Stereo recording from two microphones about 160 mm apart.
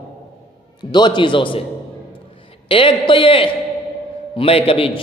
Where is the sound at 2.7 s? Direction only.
35° left (ahead or behind).